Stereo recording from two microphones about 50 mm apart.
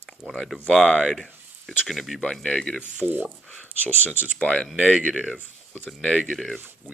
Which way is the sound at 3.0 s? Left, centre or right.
Right.